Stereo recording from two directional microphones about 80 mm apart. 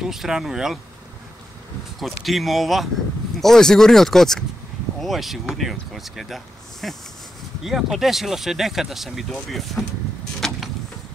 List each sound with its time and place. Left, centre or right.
0.0 s speech: centre
2.0 s speech: centre
10.4 s vehicle: centre